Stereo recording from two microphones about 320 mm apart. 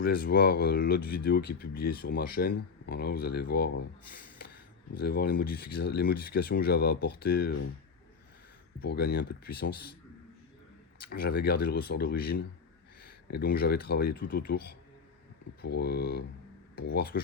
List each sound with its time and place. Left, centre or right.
0.0 s speech: left
8.8 s speech: left
11.0 s speech: left